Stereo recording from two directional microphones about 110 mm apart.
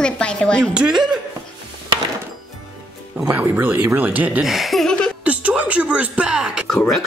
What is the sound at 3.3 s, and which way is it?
Speech, 15° right (ahead or behind).